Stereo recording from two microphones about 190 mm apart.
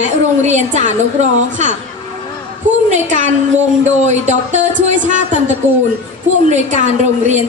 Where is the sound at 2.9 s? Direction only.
40° right (ahead or behind).